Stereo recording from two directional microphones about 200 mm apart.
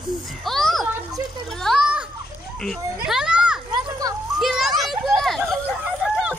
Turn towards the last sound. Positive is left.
turn(degrees=0)  # may be behind; listen again after turning